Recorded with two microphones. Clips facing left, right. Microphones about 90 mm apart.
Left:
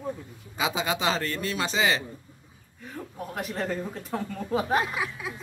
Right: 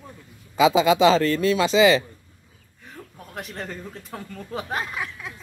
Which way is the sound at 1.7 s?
90° right.